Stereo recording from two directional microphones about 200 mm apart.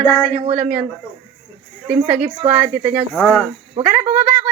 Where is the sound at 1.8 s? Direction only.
5° right (ahead or behind).